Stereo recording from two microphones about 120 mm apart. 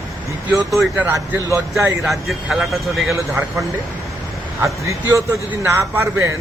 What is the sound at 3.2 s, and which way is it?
A man's voice, 25° right (ahead or behind).